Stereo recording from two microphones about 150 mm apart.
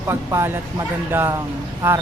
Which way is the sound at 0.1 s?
15° right (ahead or behind).